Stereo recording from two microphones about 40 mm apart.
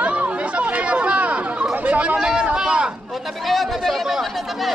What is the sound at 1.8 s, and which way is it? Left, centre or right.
Chatter, right.